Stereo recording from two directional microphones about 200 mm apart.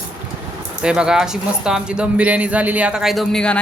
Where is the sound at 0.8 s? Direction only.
5° right (ahead or behind).